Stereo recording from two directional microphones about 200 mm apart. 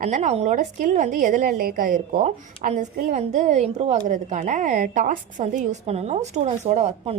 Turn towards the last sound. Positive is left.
turn(degrees=-30)  # may be behind; listen again after turning